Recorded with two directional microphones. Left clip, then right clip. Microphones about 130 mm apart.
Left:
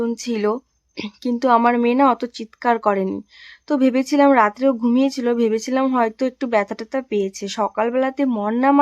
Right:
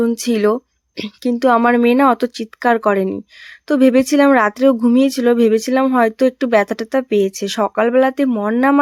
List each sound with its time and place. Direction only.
0.2 s speech: 30° right (ahead or behind)
0.9 s speech: 20° right (ahead or behind)